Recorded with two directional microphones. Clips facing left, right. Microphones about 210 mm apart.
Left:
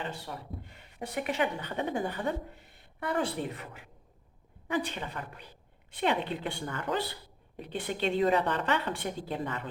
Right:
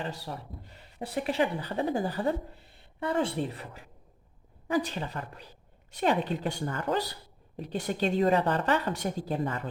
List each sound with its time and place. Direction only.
0.0 s speech: 35° right (ahead or behind)